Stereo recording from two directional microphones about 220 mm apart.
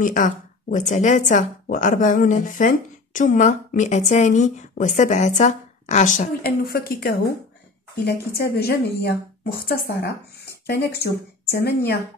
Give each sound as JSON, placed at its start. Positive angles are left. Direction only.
{"t": 0.0, "sound": "speech", "side_deg": 35}